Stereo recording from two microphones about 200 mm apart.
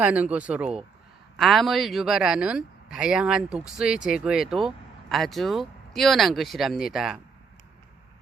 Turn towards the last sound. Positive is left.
turn(degrees=0)  # may be behind; listen again after turning